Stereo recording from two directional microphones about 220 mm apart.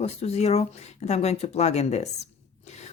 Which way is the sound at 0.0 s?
30° left (ahead or behind).